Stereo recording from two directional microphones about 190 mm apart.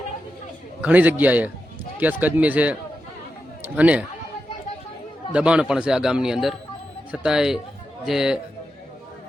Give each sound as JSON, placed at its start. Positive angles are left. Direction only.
{"t": 0.8, "sound": "speech", "side_deg": -10}
{"t": 5.3, "sound": "a man's voice", "side_deg": -5}